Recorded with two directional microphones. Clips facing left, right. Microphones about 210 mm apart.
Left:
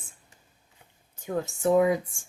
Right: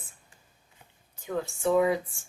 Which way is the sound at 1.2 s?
45° left (ahead or behind).